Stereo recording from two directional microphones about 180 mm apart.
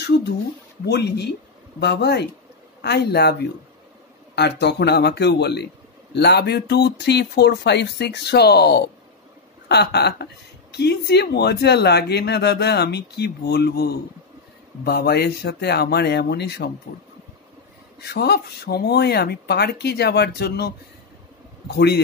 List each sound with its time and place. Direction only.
0.8 s speech: 65° left (ahead or behind)
4.4 s speech: 70° left (ahead or behind)
18.0 s speech: 65° left (ahead or behind)